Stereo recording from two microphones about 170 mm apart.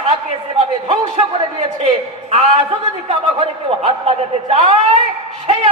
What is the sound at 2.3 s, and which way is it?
A man's voice, 35° right (ahead or behind).